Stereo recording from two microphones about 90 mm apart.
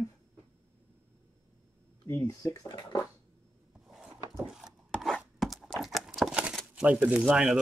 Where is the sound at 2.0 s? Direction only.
25° left (ahead or behind).